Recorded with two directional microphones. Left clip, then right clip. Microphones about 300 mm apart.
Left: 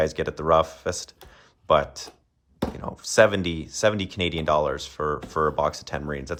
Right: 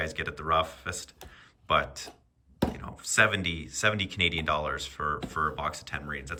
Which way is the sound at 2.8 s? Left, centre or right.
Centre.